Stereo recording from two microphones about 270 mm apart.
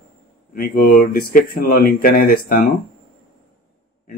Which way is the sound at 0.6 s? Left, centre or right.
Left.